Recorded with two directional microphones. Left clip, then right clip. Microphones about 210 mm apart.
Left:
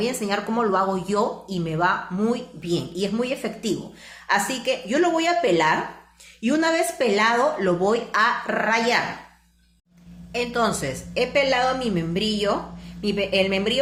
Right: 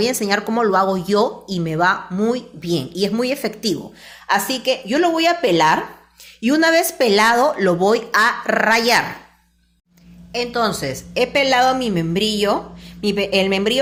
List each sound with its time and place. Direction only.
0.0 s speech: 40° right (ahead or behind)
10.3 s a woman's voice: 25° right (ahead or behind)
11.1 s speech: 45° right (ahead or behind)